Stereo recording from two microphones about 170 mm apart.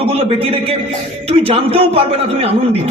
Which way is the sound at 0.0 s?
35° right (ahead or behind).